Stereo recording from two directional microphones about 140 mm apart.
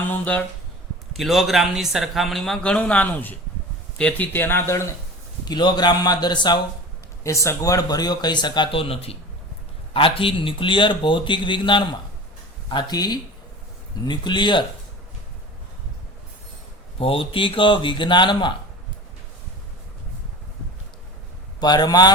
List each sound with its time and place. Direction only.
0.0 s speech: 10° left (ahead or behind)
1.1 s speech: centre (ahead or behind); by 4.9 s 20° left (ahead or behind)
5.5 s speech: 30° left (ahead or behind)
17.0 s speech: 40° left (ahead or behind)
21.6 s speech: 30° left (ahead or behind)